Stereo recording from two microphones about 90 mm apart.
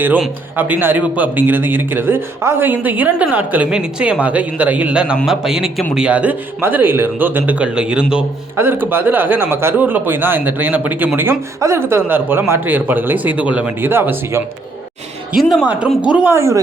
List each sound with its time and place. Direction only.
0.5 s a man's voice: 25° right (ahead or behind)
8.5 s speech: 25° right (ahead or behind)
15.3 s a man's voice: centre (ahead or behind)
15.6 s a man's voice: 15° right (ahead or behind)
16.3 s speech: 30° right (ahead or behind)